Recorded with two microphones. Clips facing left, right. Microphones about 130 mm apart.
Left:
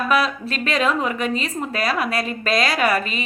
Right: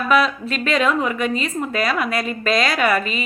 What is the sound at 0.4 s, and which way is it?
A woman's voice, 35° left (ahead or behind).